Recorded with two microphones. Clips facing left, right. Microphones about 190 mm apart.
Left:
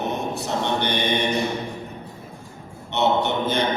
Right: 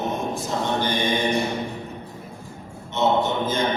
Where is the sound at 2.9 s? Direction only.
65° left (ahead or behind).